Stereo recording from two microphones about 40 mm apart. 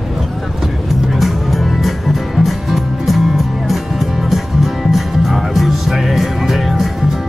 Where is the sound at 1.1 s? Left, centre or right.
Centre.